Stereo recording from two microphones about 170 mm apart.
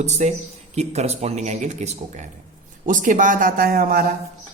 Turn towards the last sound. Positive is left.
turn(degrees=-60)  # may be behind; listen again after turning